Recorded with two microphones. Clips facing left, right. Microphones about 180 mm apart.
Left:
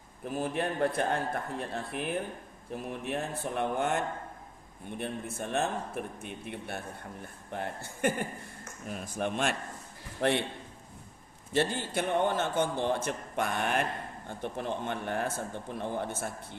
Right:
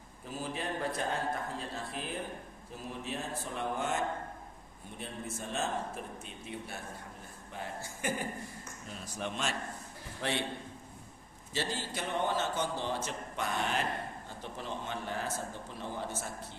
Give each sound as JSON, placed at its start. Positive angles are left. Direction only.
{"t": 0.3, "sound": "a man's voice", "side_deg": 55}
{"t": 11.5, "sound": "a man's voice", "side_deg": 55}